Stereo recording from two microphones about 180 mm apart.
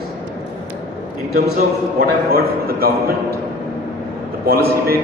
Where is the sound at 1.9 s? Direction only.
55° right (ahead or behind).